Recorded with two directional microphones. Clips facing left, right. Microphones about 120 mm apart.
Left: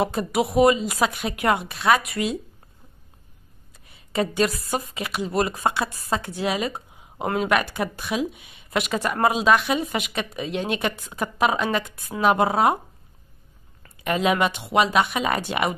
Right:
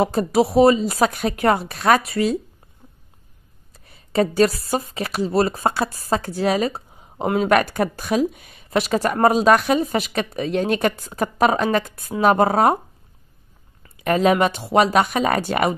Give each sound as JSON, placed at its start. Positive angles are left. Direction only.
{"t": 0.0, "sound": "a woman's voice", "side_deg": -35}
{"t": 3.7, "sound": "a woman's voice", "side_deg": -35}
{"t": 8.6, "sound": "a woman's voice", "side_deg": -35}
{"t": 14.0, "sound": "a woman's voice", "side_deg": -40}